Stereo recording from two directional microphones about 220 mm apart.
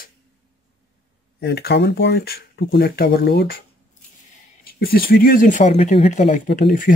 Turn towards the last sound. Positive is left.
turn(degrees=40)  # may be behind; listen again after turning